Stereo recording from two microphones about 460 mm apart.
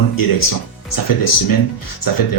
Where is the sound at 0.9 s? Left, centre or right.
Left.